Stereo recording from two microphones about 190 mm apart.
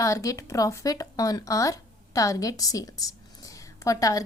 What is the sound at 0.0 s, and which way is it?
A woman's voice, 15° left (ahead or behind).